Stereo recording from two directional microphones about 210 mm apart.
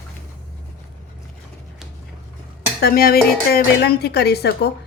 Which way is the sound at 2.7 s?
45° left (ahead or behind).